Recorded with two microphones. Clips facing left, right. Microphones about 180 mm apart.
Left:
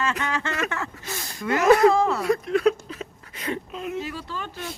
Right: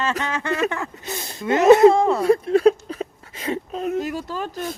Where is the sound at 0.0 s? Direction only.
35° right (ahead or behind).